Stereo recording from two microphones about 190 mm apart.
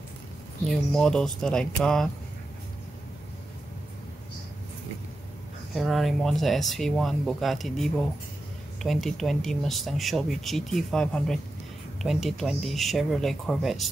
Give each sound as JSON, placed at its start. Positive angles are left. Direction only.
{"t": 0.7, "sound": "speech", "side_deg": 5}
{"t": 5.8, "sound": "speech", "side_deg": 0}